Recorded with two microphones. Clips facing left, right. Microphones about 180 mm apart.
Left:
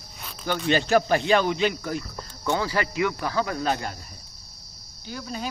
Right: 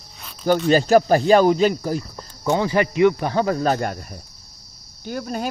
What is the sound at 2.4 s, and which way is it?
Speech, 20° right (ahead or behind).